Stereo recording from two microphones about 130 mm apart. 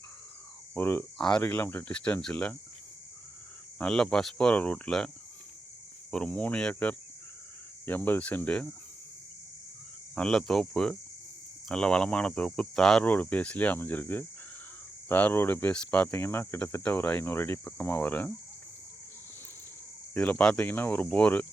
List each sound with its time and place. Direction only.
0.7 s speech: 20° left (ahead or behind)
3.8 s speech: 5° left (ahead or behind)
10.2 s cricket: 5° left (ahead or behind)
11.7 s speech: 5° left (ahead or behind)
20.1 s speech: 10° left (ahead or behind)